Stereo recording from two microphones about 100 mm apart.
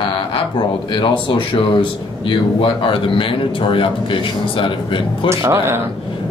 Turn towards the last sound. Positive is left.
turn(degrees=-30)  # may be behind; listen again after turning